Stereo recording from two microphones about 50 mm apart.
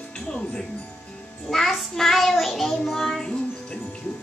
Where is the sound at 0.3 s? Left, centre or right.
Centre.